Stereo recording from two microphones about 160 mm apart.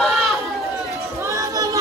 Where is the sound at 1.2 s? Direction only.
20° right (ahead or behind).